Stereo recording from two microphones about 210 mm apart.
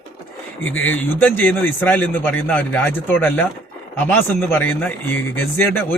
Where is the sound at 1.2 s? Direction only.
10° left (ahead or behind).